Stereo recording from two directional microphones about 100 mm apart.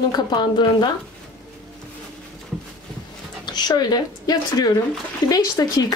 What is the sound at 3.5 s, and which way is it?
A woman's voice, 45° left (ahead or behind).